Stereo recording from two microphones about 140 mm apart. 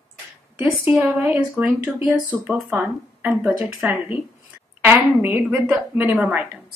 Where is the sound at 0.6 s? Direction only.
15° right (ahead or behind).